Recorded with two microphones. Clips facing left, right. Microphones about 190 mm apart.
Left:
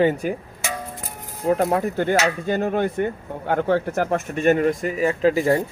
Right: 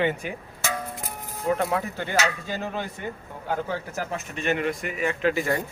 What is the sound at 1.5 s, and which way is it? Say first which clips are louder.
Speech: left 5 dB; 40° left (ahead or behind).